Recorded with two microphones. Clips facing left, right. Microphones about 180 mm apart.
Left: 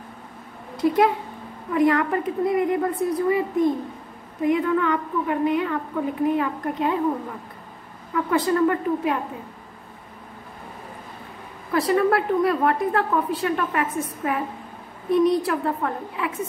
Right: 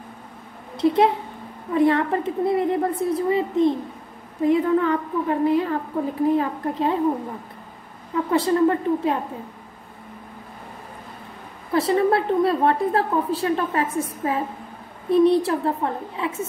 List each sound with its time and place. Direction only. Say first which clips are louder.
0.7 s a woman's voice: right 1 dB; 25° right (ahead or behind)
8.1 s a woman's voice: right 1 dB; 25° right (ahead or behind)
11.7 s a woman's voice: right 1 dB; 25° right (ahead or behind)